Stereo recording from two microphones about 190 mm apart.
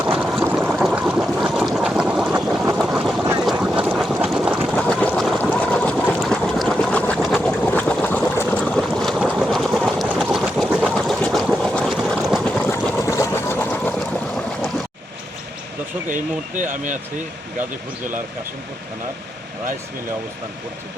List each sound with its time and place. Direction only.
0.0 s a sound: 5° right (ahead or behind)
2.7 s boat: 5° right (ahead or behind)
4.7 s boat: 5° left (ahead or behind)
10.8 s sewing machine: 5° left (ahead or behind)
16.0 s speech: 40° right (ahead or behind)